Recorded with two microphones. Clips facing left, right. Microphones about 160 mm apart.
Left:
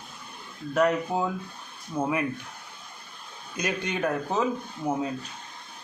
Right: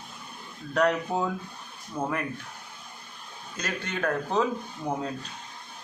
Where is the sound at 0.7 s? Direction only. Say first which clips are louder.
Left 1 dB; 5° left (ahead or behind).